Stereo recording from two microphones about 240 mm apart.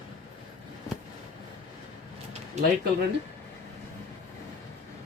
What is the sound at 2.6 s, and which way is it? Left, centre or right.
Speech, right.